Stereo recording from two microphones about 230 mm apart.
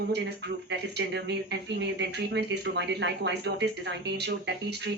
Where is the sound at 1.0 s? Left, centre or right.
Right.